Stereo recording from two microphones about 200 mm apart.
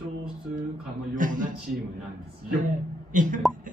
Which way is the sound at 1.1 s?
40° right (ahead or behind).